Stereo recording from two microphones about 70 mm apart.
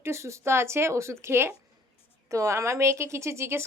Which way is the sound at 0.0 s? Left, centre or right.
Right.